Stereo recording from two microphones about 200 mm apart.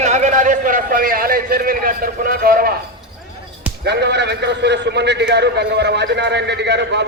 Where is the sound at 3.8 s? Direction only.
55° right (ahead or behind).